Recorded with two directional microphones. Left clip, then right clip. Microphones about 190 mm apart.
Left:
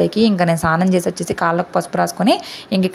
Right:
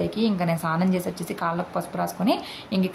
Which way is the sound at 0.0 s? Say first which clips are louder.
Left 10 dB; 40° left (ahead or behind).